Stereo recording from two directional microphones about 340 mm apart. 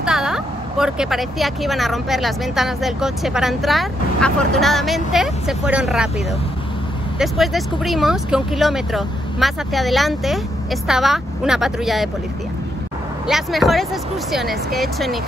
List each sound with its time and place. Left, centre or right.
0.0 s speech: centre
7.2 s speech: centre
13.3 s speech: centre